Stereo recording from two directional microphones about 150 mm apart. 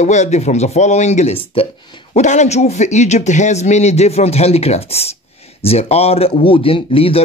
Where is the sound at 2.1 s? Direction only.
50° left (ahead or behind).